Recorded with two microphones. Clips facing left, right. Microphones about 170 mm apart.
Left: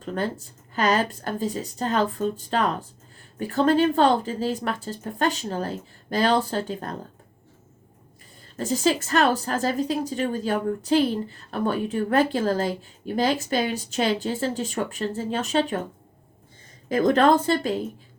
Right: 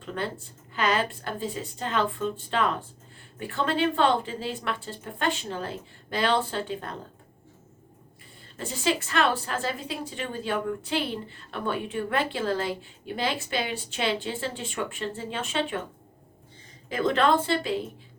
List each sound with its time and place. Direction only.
0.0 s a woman's voice: 40° left (ahead or behind)
8.5 s a woman's voice: 40° left (ahead or behind)
16.9 s a woman's voice: 40° left (ahead or behind)